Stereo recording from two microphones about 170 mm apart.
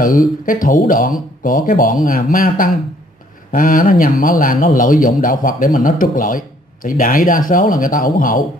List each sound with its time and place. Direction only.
0.5 s speech: 50° left (ahead or behind)